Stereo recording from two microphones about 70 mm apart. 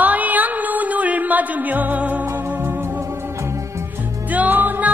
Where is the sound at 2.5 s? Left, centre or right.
Right.